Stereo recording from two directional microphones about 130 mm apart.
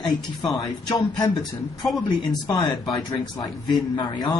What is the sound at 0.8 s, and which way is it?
Speech, 35° left (ahead or behind).